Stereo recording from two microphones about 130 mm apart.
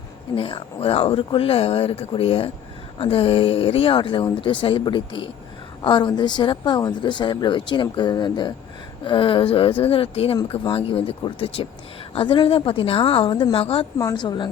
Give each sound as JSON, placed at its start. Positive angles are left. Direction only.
{"t": 0.3, "sound": "speech", "side_deg": 45}
{"t": 14.0, "sound": "speech", "side_deg": 35}